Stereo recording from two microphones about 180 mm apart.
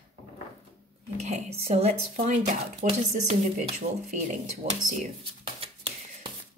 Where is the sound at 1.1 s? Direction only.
40° right (ahead or behind).